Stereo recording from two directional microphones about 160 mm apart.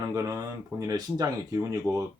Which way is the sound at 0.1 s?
20° right (ahead or behind).